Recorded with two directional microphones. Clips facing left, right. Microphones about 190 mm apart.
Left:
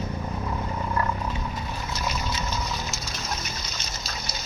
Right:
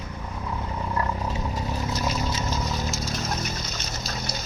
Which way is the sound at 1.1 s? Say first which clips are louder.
Right 2 dB; 35° right (ahead or behind).